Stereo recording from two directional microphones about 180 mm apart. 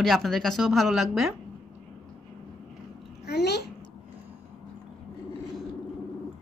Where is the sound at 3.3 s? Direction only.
65° left (ahead or behind).